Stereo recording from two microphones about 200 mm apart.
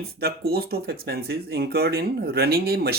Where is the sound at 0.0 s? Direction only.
50° right (ahead or behind).